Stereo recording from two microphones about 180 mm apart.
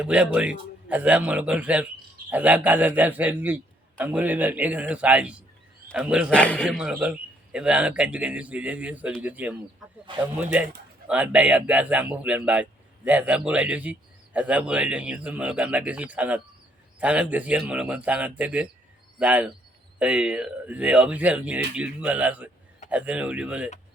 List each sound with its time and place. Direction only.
0.0 s a man's voice: 5° right (ahead or behind)
6.3 s a man's voice: 5° left (ahead or behind)
6.7 s a man's voice: 5° right (ahead or behind)